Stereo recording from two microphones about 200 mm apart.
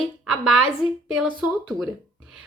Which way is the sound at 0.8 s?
5° right (ahead or behind).